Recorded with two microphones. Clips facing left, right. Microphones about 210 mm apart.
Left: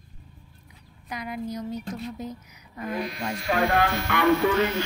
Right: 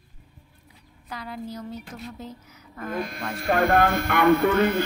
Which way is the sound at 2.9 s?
50° right (ahead or behind).